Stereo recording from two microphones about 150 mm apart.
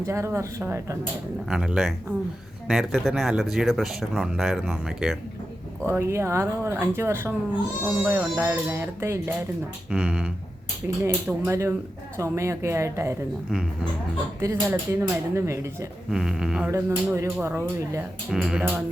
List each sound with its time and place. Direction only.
0.0 s speech: 20° right (ahead or behind)
1.5 s speech: 5° right (ahead or behind)
5.8 s speech: 15° right (ahead or behind)
9.9 s speech: 5° right (ahead or behind)
11.0 s speech: 20° right (ahead or behind)
13.5 s speech: centre (ahead or behind)
14.4 s speech: 15° right (ahead or behind)
16.0 s speech: 5° right (ahead or behind)
16.7 s speech: 20° right (ahead or behind)
18.3 s speech: centre (ahead or behind)